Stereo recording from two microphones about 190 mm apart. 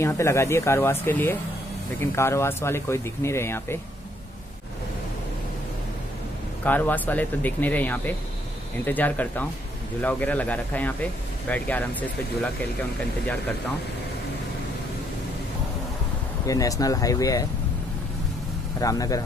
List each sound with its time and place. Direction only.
0.0 s speech: 15° left (ahead or behind)
6.6 s speech: 10° left (ahead or behind)
16.4 s speech: 20° left (ahead or behind)
18.8 s speech: 20° left (ahead or behind)